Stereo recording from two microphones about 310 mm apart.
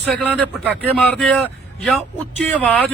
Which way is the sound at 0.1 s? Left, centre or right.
Centre.